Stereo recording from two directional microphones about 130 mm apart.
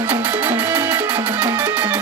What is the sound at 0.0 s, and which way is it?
Music, 15° right (ahead or behind).